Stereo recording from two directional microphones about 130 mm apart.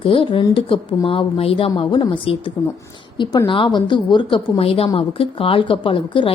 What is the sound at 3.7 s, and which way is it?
A woman's voice, 35° left (ahead or behind).